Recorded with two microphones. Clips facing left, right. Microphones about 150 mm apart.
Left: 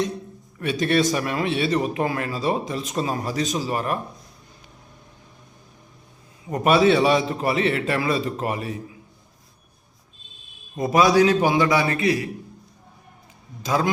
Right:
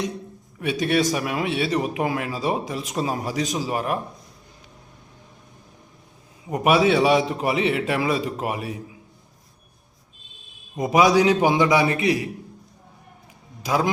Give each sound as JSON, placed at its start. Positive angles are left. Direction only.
{"t": 0.6, "sound": "speech", "side_deg": -10}
{"t": 6.5, "sound": "speech", "side_deg": -10}
{"t": 10.8, "sound": "speech", "side_deg": -15}
{"t": 13.6, "sound": "speech", "side_deg": -10}